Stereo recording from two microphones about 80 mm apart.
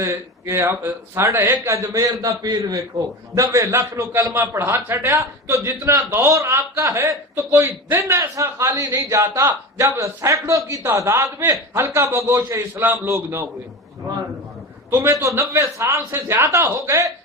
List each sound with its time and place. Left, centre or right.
0.0 s a man's voice: right
8.0 s a man's voice: right
14.8 s a man's voice: right